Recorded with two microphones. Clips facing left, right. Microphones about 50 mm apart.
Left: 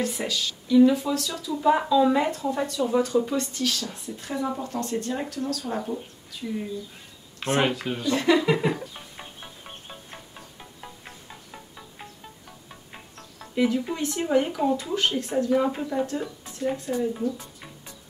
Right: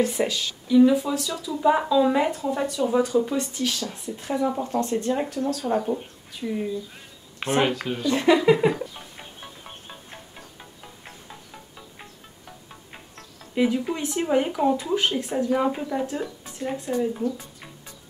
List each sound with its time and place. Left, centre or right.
0.0 s speech: right
0.7 s speech: centre; by 6.6 s right
7.6 s speech: centre
8.1 s speech: right
13.6 s speech: centre